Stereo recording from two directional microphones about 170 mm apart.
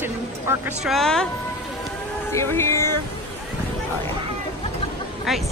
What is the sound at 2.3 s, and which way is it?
Speech, 15° left (ahead or behind).